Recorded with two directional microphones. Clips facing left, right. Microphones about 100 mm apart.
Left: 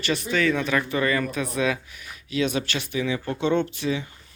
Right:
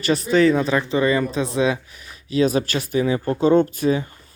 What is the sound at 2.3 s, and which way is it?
Speech, 35° right (ahead or behind).